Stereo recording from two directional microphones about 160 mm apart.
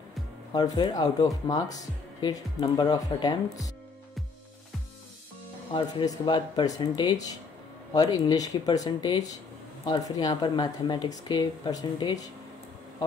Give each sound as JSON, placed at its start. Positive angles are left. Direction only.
{"t": 0.5, "sound": "speech", "side_deg": 25}
{"t": 5.7, "sound": "speech", "side_deg": 30}